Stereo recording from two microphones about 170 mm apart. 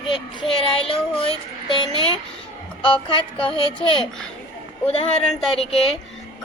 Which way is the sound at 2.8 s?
30° left (ahead or behind).